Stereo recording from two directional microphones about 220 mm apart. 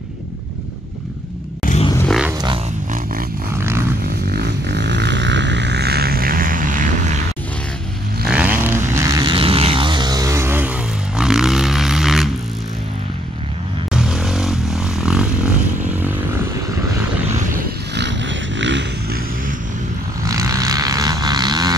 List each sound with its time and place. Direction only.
1.6 s a sound: 35° left (ahead or behind)
2.0 s a sound: centre (ahead or behind)
3.5 s vehicle: 10° right (ahead or behind)
4.3 s vehicle: 50° right (ahead or behind)
8.3 s vehicle: 5° right (ahead or behind)
13.9 s vehicle: centre (ahead or behind)
17.9 s vehicle: 55° right (ahead or behind)
20.2 s vehicle: 15° right (ahead or behind)